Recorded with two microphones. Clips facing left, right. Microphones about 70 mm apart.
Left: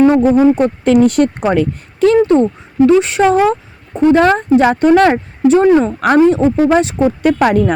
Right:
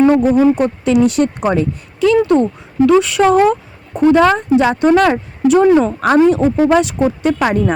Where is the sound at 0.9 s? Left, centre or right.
Left.